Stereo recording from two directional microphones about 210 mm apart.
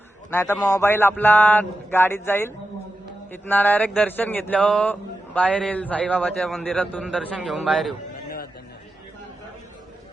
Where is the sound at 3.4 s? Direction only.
10° left (ahead or behind).